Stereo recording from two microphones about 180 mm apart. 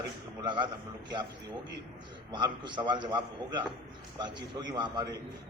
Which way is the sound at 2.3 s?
25° right (ahead or behind).